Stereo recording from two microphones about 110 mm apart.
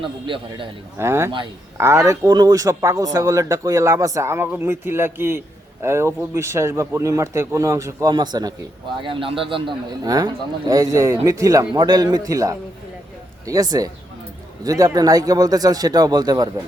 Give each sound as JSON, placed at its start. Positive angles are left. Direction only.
{"t": 0.0, "sound": "a man's voice", "side_deg": -50}
{"t": 0.9, "sound": "a man's voice", "side_deg": -25}
{"t": 8.1, "sound": "speech", "side_deg": -40}
{"t": 9.0, "sound": "a man's voice", "side_deg": -50}
{"t": 10.0, "sound": "speech", "side_deg": -35}
{"t": 11.7, "sound": "speech", "side_deg": -40}